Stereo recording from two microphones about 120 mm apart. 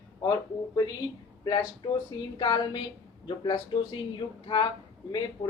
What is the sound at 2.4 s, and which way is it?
Speech, 40° left (ahead or behind).